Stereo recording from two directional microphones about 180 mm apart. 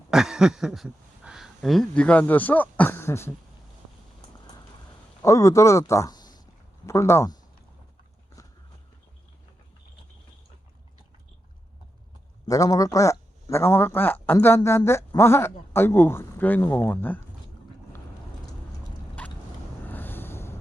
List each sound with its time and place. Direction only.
0.1 s speech: 5° right (ahead or behind); by 3.3 s 15° left (ahead or behind)
5.2 s a man's voice: 15° left (ahead or behind)
12.5 s a man's voice: 20° left (ahead or behind)
19.2 s vehicle: 10° left (ahead or behind)
19.8 s a sound: 10° left (ahead or behind)